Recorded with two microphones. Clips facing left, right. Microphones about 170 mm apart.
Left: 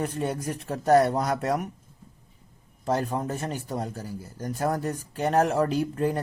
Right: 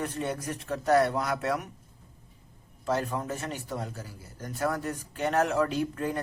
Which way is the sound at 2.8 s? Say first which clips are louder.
Left 3 dB; 35° left (ahead or behind).